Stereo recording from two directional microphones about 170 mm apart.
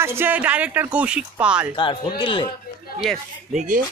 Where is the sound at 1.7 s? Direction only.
30° left (ahead or behind).